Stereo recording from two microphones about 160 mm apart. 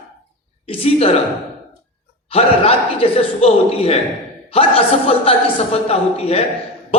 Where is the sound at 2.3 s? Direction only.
40° left (ahead or behind).